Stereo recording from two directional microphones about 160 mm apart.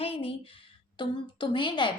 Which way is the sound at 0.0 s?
35° left (ahead or behind).